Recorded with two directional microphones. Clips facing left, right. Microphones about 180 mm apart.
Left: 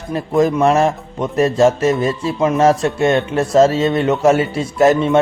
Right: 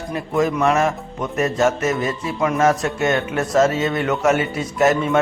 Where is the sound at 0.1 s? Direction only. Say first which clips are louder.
Left 5 dB; 35° left (ahead or behind).